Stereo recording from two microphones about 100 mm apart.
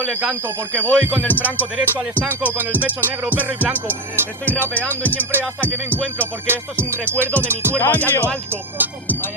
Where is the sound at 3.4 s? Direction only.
20° right (ahead or behind).